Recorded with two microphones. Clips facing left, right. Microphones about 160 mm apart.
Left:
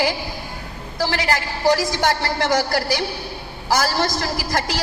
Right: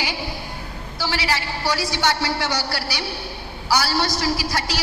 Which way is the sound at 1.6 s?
45° left (ahead or behind).